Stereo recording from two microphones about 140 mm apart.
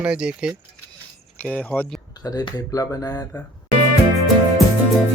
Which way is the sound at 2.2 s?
25° left (ahead or behind).